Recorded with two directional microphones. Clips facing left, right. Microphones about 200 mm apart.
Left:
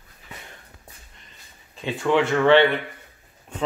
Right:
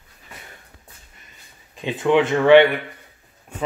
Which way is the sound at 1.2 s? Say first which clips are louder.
Right 1 dB; 10° right (ahead or behind).